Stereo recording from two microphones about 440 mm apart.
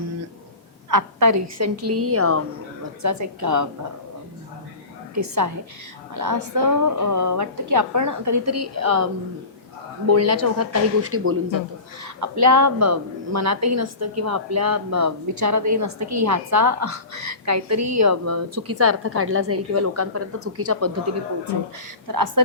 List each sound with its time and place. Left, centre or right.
0.9 s a woman's voice: right
5.1 s a woman's voice: right
10.1 s a woman's voice: right
12.0 s a woman's voice: right
22.0 s a woman's voice: right